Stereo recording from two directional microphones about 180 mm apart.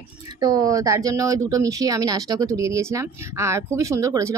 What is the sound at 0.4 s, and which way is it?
Speech, 20° right (ahead or behind).